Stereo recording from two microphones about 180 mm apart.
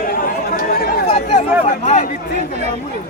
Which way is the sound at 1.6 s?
40° left (ahead or behind).